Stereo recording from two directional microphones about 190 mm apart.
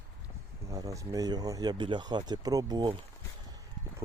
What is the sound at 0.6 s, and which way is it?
Speech, 20° right (ahead or behind).